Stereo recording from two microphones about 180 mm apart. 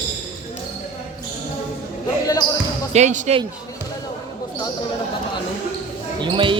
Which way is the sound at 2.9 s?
40° right (ahead or behind).